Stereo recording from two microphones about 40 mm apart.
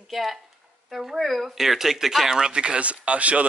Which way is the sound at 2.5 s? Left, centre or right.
Right.